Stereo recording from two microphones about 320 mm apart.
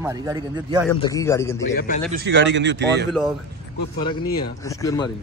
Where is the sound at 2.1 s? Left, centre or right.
Right.